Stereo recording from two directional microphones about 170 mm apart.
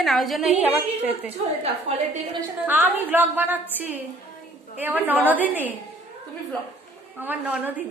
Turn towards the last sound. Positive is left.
turn(degrees=-10)  # may be behind; listen again after turning